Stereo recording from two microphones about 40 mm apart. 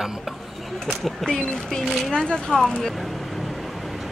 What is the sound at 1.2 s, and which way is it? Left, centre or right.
Speech, left.